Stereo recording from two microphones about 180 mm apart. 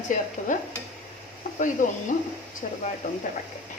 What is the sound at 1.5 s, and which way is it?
Speech, 45° left (ahead or behind).